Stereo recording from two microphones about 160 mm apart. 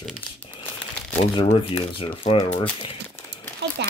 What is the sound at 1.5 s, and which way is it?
Speech, 30° left (ahead or behind).